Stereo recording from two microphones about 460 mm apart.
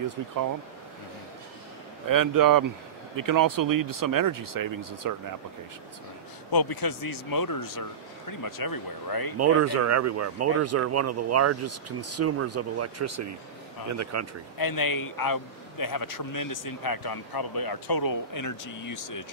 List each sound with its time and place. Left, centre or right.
2.0 s speech: right
6.5 s a man's voice: left
9.4 s speech: right
14.6 s a man's voice: left